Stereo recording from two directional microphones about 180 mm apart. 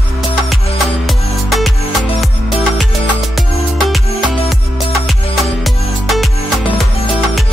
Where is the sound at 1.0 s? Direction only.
Centre (ahead or behind).